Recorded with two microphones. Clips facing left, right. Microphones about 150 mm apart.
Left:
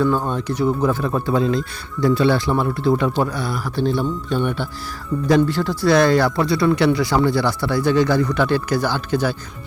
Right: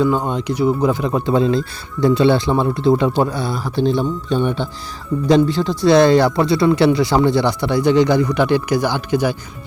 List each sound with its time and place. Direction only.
0.0 s speech: 15° right (ahead or behind)